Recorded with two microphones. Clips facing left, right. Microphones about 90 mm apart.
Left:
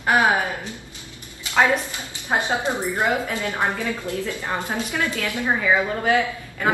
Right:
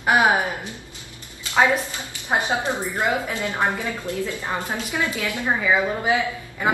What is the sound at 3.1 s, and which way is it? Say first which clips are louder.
A woman's voice: even; 20° right (ahead or behind).